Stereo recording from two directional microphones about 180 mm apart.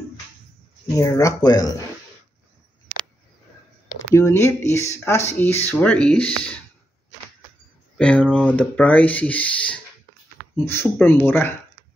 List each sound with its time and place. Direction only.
0.8 s speech: 20° left (ahead or behind)
4.1 s speech: 15° left (ahead or behind)
8.0 s speech: 5° left (ahead or behind)